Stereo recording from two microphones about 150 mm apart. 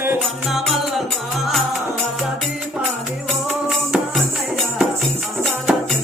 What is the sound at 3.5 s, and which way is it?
Music, centre (ahead or behind).